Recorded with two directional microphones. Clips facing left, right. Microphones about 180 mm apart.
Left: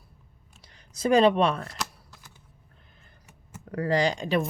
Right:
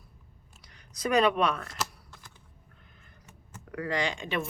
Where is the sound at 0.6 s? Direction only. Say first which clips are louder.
Left 5 dB; 30° left (ahead or behind).